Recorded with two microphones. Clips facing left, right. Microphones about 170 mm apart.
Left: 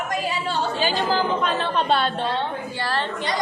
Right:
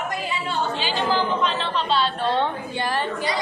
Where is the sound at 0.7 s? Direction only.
45° left (ahead or behind).